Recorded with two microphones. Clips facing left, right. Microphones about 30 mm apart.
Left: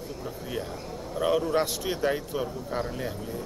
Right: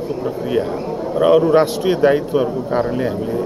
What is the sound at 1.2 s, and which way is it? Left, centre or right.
A man's voice, right.